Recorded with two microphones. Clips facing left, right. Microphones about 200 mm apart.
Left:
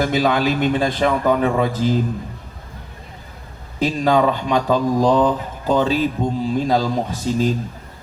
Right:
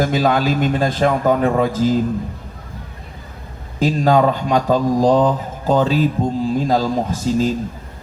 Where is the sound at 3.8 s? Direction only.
45° right (ahead or behind).